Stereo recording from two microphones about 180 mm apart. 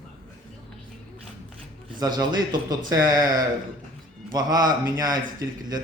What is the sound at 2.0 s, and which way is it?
A man's voice, 20° right (ahead or behind).